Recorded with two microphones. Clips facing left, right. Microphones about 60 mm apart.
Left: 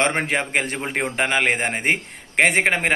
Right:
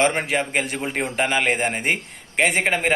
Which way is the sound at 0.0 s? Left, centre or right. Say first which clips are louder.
Right 1 dB; left.